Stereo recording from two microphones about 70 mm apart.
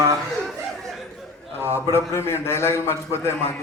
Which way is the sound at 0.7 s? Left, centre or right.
Centre.